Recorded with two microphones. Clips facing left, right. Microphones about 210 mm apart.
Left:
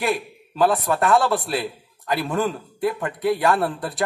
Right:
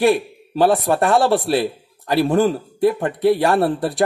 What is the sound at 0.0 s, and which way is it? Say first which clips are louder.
A man's voice: right 8 dB; 30° right (ahead or behind).